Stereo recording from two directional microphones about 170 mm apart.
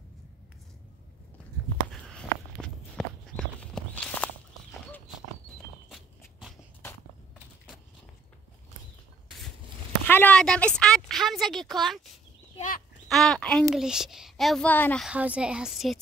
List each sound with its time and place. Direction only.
1.9 s walk: centre (ahead or behind)
5.9 s walk: centre (ahead or behind)
7.3 s a sound: 5° right (ahead or behind)
10.0 s a woman's voice: 10° left (ahead or behind)
12.5 s a sound: 50° left (ahead or behind)
13.1 s a woman's voice: centre (ahead or behind)
15.0 s a woman's voice: 5° right (ahead or behind)